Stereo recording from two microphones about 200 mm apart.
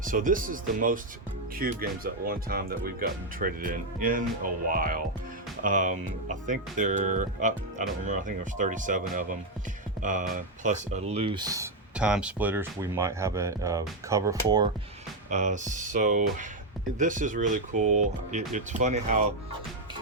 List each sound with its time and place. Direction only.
0.0 s speech: 45° right (ahead or behind); by 11.7 s 20° right (ahead or behind)
11.9 s speech: 5° right (ahead or behind)
15.3 s speech: 35° right (ahead or behind)